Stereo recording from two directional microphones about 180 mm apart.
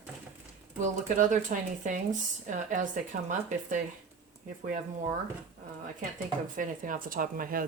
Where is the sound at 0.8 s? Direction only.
45° right (ahead or behind).